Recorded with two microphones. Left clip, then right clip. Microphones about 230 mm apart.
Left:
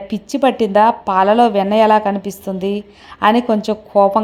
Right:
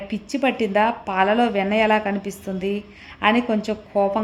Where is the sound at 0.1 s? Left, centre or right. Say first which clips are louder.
Left 7 dB; left.